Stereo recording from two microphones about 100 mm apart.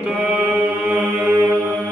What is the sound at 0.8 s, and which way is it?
Mantra, 15° right (ahead or behind).